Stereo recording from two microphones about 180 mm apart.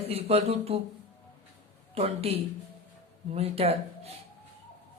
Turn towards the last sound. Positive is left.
turn(degrees=-35)  # may be behind; listen again after turning